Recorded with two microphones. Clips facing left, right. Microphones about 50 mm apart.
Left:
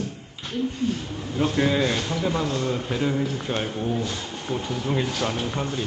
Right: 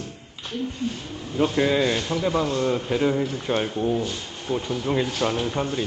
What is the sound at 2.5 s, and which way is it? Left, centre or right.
Speech, centre.